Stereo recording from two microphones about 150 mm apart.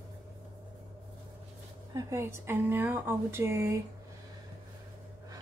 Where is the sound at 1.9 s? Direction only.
20° right (ahead or behind).